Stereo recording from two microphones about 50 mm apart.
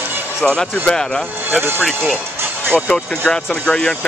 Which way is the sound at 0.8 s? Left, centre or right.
Centre.